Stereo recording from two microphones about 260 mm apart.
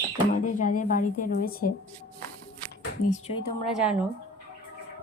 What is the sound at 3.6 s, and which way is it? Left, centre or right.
Speech, centre.